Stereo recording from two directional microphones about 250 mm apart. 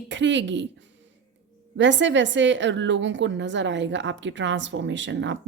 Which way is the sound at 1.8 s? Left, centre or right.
Right.